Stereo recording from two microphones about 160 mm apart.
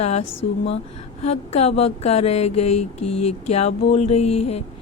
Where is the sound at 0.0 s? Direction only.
40° left (ahead or behind).